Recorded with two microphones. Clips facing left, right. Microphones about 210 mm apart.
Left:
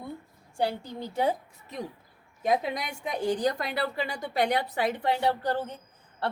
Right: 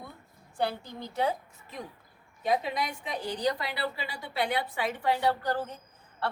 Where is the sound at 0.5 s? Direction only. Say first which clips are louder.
Left 2 dB; 15° left (ahead or behind).